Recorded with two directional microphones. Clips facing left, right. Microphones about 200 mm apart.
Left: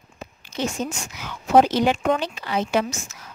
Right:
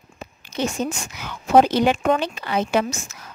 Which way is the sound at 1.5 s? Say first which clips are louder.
Right 1 dB; 55° right (ahead or behind).